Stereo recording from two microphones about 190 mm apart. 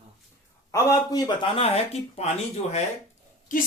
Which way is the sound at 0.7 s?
20° left (ahead or behind).